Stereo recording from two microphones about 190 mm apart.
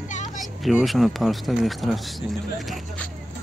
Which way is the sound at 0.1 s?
40° left (ahead or behind).